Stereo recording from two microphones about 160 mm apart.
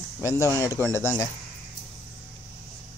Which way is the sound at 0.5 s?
20° left (ahead or behind).